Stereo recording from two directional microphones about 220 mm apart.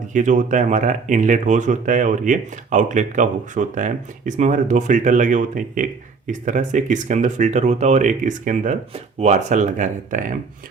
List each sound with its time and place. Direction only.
0.1 s speech: 35° right (ahead or behind)